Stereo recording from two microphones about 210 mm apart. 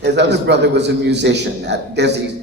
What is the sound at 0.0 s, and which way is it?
A man's voice, 55° right (ahead or behind).